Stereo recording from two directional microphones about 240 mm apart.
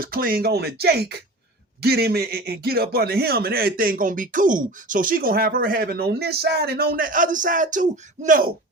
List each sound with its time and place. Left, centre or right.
0.0 s a man's voice: right